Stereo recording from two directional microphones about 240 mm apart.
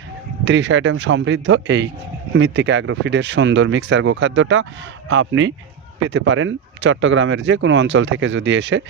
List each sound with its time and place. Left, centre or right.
0.4 s speech: right